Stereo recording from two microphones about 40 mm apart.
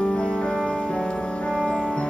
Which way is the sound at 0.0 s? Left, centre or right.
Left.